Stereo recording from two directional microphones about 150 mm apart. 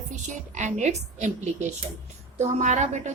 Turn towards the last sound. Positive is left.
turn(degrees=-50)  # may be behind; listen again after turning